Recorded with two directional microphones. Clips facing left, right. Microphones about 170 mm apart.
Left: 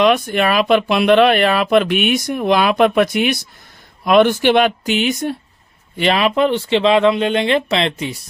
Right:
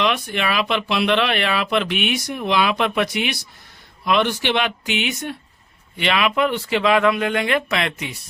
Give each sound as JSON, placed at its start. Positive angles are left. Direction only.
{"t": 0.0, "sound": "speech", "side_deg": 45}